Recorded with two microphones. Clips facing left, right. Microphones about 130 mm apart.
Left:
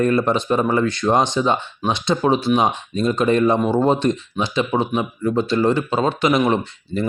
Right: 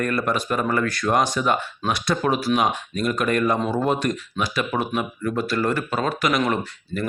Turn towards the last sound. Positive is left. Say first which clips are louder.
# left 4 dB
turn(degrees=25)  # may be behind; listen again after turning